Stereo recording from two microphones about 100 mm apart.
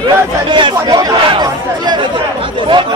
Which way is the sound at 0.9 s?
40° right (ahead or behind).